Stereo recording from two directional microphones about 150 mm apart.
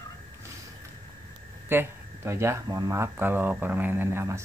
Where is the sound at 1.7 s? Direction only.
15° right (ahead or behind).